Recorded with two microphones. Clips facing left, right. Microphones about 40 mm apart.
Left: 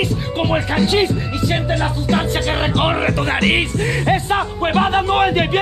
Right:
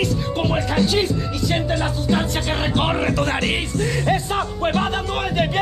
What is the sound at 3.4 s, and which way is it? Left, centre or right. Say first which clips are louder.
Music: left 5 dB; left.